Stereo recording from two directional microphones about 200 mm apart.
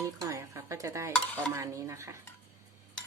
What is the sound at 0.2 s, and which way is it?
Dishes, 15° right (ahead or behind).